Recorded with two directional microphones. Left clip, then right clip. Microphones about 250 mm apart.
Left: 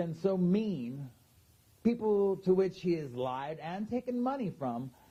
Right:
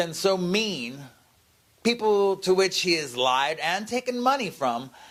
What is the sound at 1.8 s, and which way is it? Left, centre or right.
A man's voice, centre.